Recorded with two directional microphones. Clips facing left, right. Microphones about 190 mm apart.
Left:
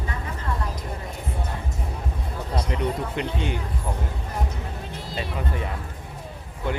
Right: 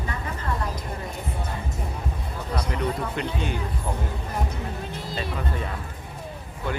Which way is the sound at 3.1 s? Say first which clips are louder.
Left 1 dB; 20° left (ahead or behind).